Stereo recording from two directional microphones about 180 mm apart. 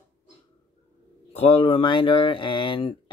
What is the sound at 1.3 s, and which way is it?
Speech, 30° left (ahead or behind).